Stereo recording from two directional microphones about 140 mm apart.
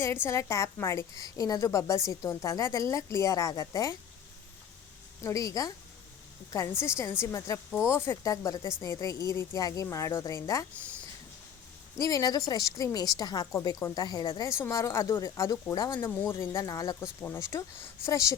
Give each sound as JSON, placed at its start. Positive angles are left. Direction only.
{"t": 0.3, "sound": "a woman's voice", "side_deg": 20}
{"t": 5.2, "sound": "a woman's voice", "side_deg": 25}
{"t": 11.9, "sound": "a woman's voice", "side_deg": 25}
{"t": 16.0, "sound": "a woman's voice", "side_deg": 15}